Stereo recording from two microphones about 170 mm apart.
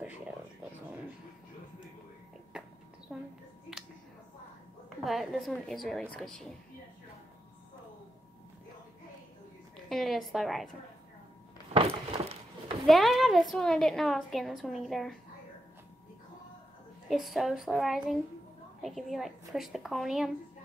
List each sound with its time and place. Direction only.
2.5 s a sound: 5° right (ahead or behind)
4.8 s a woman's voice: centre (ahead or behind)
9.8 s a woman's voice: centre (ahead or behind)
12.2 s a sound: 35° right (ahead or behind)
12.8 s a woman's voice: centre (ahead or behind)
17.1 s a woman's voice: centre (ahead or behind)